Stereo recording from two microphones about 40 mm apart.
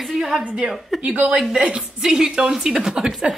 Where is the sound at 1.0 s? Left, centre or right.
Right.